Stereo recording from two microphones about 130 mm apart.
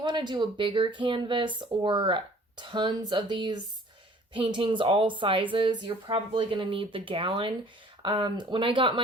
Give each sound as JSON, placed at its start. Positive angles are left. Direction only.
{"t": 0.0, "sound": "speech", "side_deg": -35}